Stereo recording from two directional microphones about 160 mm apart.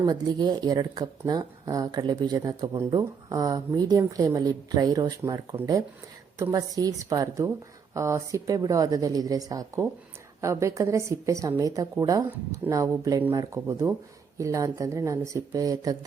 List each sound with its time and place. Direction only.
0.0 s a woman's voice: 25° right (ahead or behind)